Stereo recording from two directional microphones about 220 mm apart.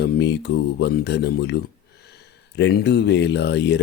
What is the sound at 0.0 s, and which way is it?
Speech, 50° left (ahead or behind).